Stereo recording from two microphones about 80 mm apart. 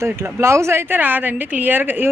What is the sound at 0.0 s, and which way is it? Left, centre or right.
A woman's voice, right.